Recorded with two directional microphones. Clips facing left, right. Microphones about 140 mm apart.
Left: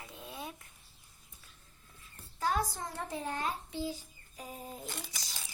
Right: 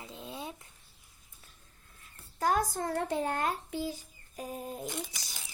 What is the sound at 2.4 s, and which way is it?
A child's voice, 45° right (ahead or behind).